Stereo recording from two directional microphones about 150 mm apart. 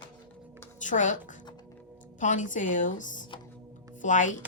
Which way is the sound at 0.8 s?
55° left (ahead or behind).